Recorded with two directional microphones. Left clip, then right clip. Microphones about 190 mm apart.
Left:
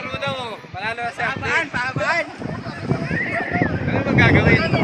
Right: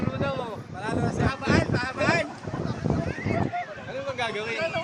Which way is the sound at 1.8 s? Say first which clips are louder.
Left 4 dB; 20° right (ahead or behind).